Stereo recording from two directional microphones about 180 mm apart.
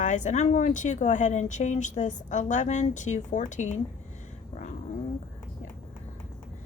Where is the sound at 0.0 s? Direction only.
45° left (ahead or behind).